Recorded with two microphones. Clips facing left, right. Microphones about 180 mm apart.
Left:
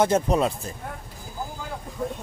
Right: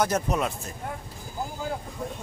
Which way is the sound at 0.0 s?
30° left (ahead or behind).